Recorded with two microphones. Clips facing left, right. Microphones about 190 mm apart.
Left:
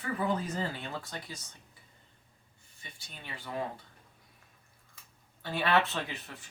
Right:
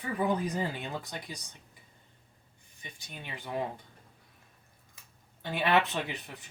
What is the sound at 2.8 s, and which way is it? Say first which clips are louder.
Speech: right 3 dB; 15° right (ahead or behind).